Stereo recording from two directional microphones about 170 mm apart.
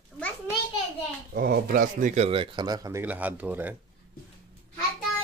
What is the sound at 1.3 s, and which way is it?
Speech, 60° right (ahead or behind).